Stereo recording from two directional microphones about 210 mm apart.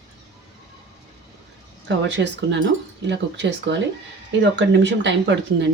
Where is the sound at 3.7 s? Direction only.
55° right (ahead or behind).